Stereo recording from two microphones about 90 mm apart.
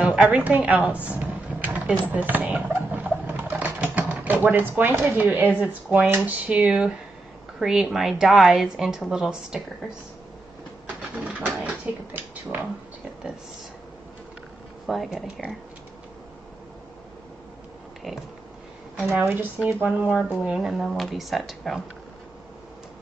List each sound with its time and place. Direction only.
0.0 s speech: 15° right (ahead or behind)
1.1 s a sound: 20° right (ahead or behind)
5.6 s a woman's voice: 15° right (ahead or behind)
11.0 s speech: 15° right (ahead or behind)
14.9 s a woman's voice: centre (ahead or behind)
19.0 s speech: 25° right (ahead or behind)
20.4 s a woman's voice: 5° right (ahead or behind)